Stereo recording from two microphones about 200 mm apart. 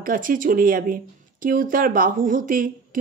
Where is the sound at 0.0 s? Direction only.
45° right (ahead or behind).